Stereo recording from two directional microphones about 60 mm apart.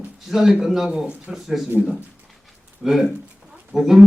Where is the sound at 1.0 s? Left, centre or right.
Centre.